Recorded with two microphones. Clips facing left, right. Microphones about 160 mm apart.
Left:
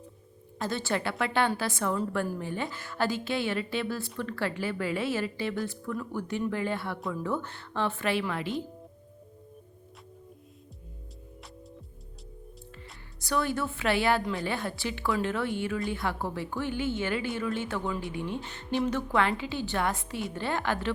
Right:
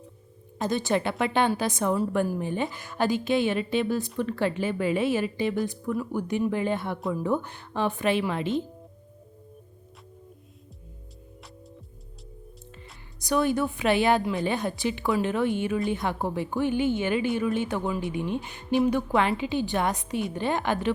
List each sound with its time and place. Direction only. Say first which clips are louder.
0.6 s a woman's voice: right 5 dB; 15° right (ahead or behind)
12.7 s speech: right 1 dB; 20° right (ahead or behind)